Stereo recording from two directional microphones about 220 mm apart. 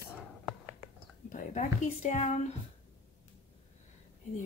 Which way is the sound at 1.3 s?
35° left (ahead or behind).